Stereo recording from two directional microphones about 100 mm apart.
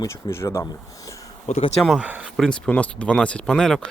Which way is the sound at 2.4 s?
10° left (ahead or behind).